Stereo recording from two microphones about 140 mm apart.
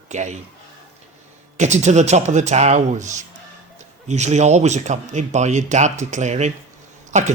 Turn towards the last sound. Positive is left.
turn(degrees=-55)  # may be behind; listen again after turning